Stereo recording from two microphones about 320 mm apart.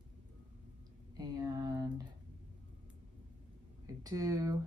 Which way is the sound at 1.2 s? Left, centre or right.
Centre.